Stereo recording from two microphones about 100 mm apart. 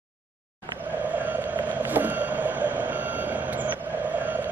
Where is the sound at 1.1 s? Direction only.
15° right (ahead or behind).